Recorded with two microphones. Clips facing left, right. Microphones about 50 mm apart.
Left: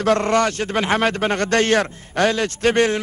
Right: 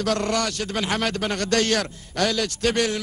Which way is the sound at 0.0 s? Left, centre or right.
Left.